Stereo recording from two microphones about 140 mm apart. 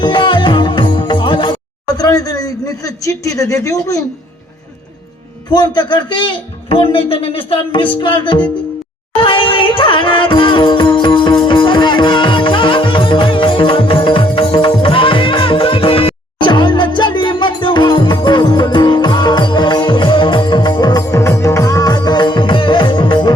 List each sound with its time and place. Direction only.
0.0 s music: 35° left (ahead or behind)
2.0 s a man's voice: 25° left (ahead or behind)
5.5 s a man's voice: 30° left (ahead or behind)
9.2 s music: 40° left (ahead or behind)